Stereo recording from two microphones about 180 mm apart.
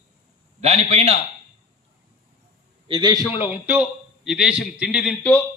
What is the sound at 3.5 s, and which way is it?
A man's voice, 10° right (ahead or behind).